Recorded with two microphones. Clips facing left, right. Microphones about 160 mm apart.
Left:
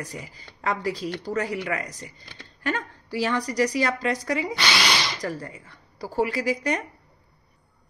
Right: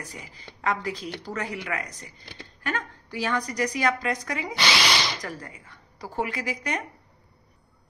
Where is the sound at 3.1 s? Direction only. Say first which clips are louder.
Left 3 dB; 35° left (ahead or behind).